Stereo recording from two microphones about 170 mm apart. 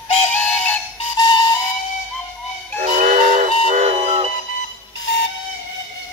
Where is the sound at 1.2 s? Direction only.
25° left (ahead or behind).